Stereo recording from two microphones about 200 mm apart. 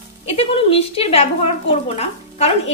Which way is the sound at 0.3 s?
30° left (ahead or behind).